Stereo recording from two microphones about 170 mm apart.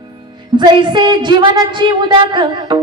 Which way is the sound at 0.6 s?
25° right (ahead or behind).